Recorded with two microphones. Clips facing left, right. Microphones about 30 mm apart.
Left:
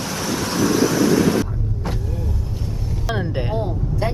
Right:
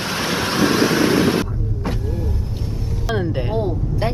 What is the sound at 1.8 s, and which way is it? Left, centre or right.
Vehicle, centre.